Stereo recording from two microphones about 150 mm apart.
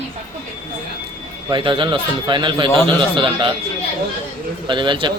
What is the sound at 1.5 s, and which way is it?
A man's voice, 35° right (ahead or behind).